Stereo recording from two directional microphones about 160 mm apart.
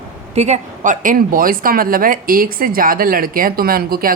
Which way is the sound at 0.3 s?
45° right (ahead or behind).